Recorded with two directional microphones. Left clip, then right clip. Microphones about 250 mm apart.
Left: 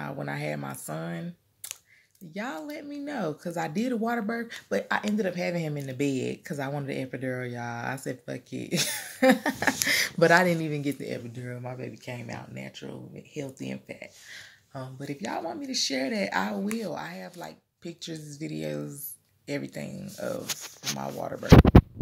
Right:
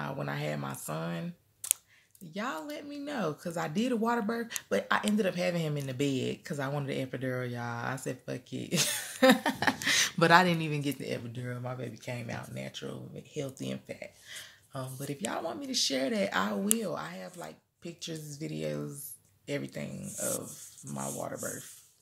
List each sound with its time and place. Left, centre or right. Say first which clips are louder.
0.0 s speech: left 2 dB; centre
2.3 s speech: left 1 dB; centre
20.2 s speech: left 5 dB; centre